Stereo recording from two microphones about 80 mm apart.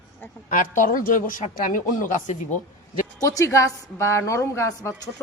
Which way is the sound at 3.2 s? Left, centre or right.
Left.